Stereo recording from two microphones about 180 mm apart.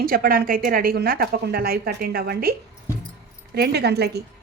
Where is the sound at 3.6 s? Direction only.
65° right (ahead or behind).